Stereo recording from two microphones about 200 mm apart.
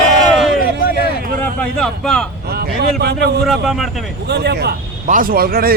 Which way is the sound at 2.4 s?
50° right (ahead or behind).